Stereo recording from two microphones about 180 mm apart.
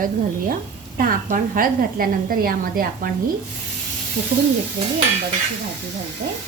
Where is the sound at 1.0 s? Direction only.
50° right (ahead or behind).